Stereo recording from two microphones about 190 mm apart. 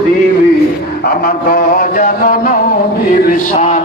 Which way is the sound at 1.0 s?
50° left (ahead or behind).